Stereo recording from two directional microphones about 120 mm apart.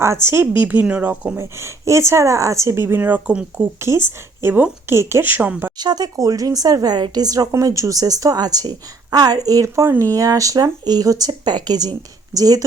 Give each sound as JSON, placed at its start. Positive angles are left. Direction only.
{"t": 0.0, "sound": "speech", "side_deg": -20}
{"t": 5.7, "sound": "speech", "side_deg": -35}